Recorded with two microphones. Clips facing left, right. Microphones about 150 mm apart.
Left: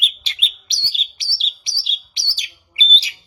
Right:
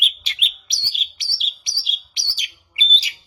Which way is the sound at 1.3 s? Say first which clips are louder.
Left 2 dB; 30° left (ahead or behind).